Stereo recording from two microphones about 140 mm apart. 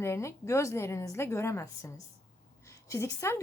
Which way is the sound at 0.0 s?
20° left (ahead or behind).